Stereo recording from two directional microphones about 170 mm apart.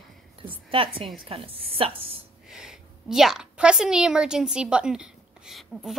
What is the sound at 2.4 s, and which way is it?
A woman's voice, 5° right (ahead or behind).